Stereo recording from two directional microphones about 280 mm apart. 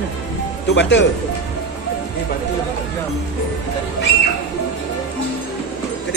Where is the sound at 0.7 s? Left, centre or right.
Left.